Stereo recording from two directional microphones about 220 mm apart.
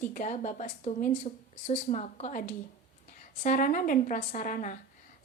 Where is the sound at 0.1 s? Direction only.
35° left (ahead or behind).